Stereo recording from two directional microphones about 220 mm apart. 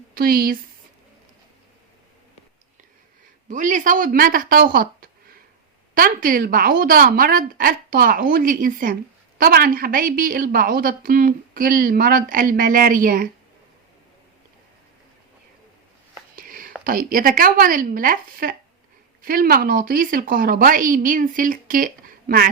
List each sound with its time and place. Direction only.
0.1 s speech: 45° right (ahead or behind)
3.5 s a woman's voice: 35° right (ahead or behind)
16.3 s a sound: 40° right (ahead or behind)
16.8 s a woman's voice: 40° right (ahead or behind)